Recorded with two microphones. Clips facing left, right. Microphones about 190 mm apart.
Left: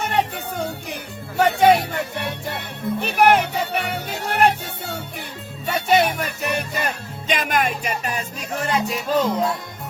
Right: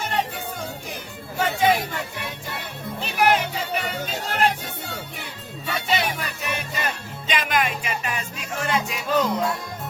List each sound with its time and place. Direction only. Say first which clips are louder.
0.0 s music: left 4 dB; 60° left (ahead or behind)
3.0 s music: left 4 dB; 60° left (ahead or behind); by 9.5 s 30° left (ahead or behind)